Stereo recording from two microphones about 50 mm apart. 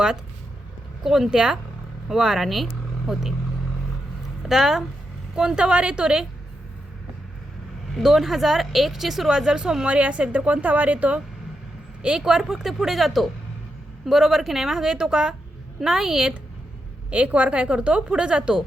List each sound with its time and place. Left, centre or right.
1.0 s a woman's voice: centre
4.4 s a woman's voice: centre
7.9 s speech: centre
9.8 s a woman's voice: right
12.2 s a woman's voice: centre
17.1 s a woman's voice: right